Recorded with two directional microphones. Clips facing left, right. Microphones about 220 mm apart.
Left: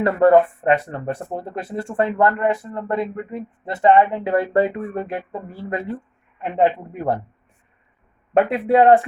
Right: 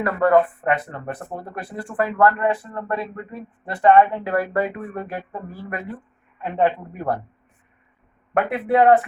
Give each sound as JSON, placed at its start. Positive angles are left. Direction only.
{"t": 0.0, "sound": "speech", "side_deg": 25}
{"t": 8.3, "sound": "speech", "side_deg": 25}